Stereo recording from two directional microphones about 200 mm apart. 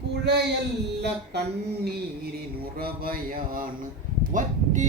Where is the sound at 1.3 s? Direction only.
55° right (ahead or behind).